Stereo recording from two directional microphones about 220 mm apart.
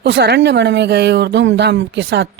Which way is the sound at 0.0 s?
50° right (ahead or behind).